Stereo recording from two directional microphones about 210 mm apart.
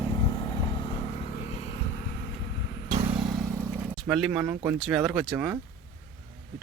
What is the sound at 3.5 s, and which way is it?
Vehicle, 10° right (ahead or behind).